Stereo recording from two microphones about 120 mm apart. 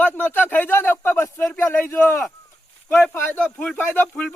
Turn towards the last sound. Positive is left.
turn(degrees=10)  # may be behind; listen again after turning